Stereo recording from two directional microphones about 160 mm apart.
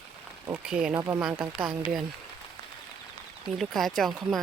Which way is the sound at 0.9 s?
20° right (ahead or behind).